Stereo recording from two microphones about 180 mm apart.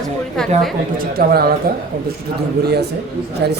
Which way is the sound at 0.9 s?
55° right (ahead or behind).